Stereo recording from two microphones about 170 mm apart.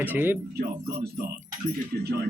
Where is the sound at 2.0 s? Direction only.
60° right (ahead or behind).